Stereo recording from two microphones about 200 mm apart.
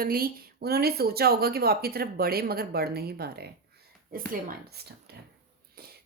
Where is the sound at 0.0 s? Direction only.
50° right (ahead or behind).